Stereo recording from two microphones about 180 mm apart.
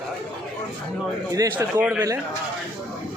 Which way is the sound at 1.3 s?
20° right (ahead or behind).